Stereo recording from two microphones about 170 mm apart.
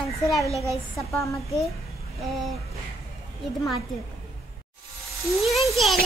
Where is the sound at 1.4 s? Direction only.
Centre (ahead or behind).